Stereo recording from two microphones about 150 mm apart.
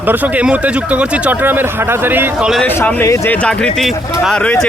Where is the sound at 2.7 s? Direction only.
10° left (ahead or behind).